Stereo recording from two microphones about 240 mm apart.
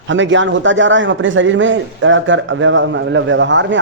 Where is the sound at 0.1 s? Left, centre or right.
Right.